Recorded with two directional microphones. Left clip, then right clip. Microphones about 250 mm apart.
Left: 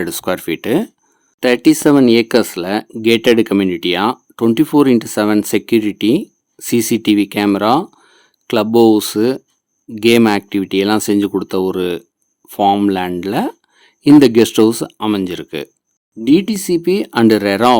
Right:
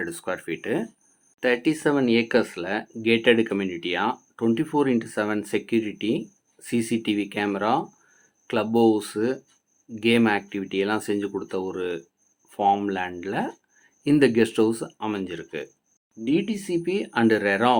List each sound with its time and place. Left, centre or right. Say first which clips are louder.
0.0 s speech: left 10 dB; left